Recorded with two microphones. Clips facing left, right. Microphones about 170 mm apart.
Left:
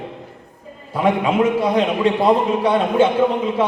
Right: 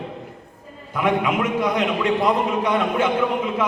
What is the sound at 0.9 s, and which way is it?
A man's voice, 30° left (ahead or behind).